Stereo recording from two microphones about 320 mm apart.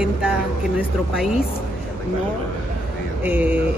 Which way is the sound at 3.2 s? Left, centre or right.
Centre.